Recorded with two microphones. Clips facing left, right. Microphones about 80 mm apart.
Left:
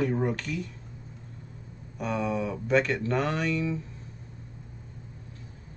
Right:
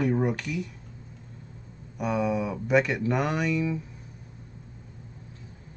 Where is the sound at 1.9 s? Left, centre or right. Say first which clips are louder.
Right 3 dB; centre.